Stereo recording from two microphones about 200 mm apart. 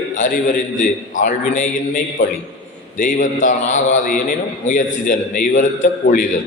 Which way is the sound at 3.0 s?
40° left (ahead or behind).